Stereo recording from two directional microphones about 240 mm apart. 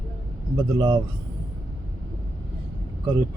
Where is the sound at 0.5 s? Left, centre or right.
Centre.